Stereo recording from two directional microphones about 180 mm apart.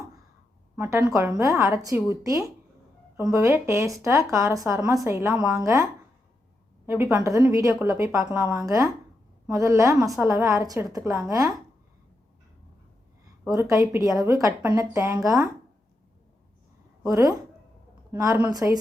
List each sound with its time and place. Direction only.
0.8 s a woman's voice: 15° right (ahead or behind)
13.5 s a woman's voice: 15° right (ahead or behind)
17.0 s a woman's voice: 15° right (ahead or behind)